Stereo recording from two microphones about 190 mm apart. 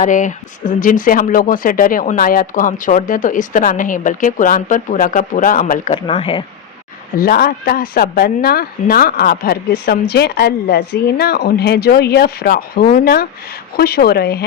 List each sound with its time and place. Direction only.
0.0 s speech: 40° left (ahead or behind)
5.9 s speech: 30° left (ahead or behind)
7.2 s a woman's voice: 50° left (ahead or behind)